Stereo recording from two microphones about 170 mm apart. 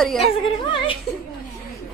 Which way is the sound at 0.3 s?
30° left (ahead or behind).